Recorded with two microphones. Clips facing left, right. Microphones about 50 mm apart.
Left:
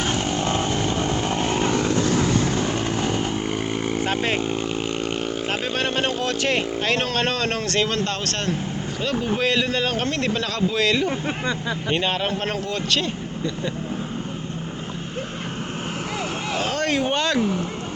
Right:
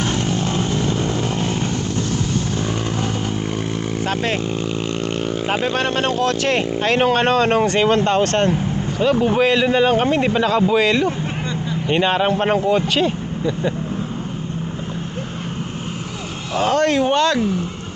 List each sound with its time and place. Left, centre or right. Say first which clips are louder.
0.0 s vehicle: right 2 dB; centre
0.3 s vehicle: right 2 dB; left
1.7 s vehicle: left 2 dB; left
2.6 s vehicle: right 1 dB; centre
4.4 s vehicle: right 2 dB; left
5.5 s a sound: right 6 dB; centre
7.0 s speech: right 8 dB; centre
9.0 s speech: right 8 dB; centre
16.6 s speech: right 8 dB; centre